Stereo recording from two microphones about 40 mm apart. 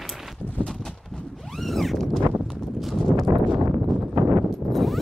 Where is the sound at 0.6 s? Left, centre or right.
Centre.